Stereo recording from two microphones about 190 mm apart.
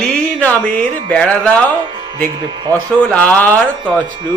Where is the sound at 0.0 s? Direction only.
5° left (ahead or behind).